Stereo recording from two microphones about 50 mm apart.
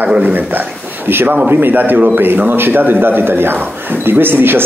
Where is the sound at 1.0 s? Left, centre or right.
Right.